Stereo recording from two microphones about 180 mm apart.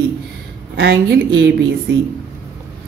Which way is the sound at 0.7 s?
70° right (ahead or behind).